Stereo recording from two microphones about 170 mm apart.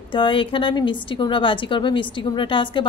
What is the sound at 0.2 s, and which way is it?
A woman's voice, 30° left (ahead or behind).